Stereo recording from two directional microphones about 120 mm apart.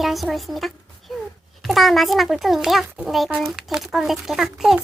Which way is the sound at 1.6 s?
Centre (ahead or behind).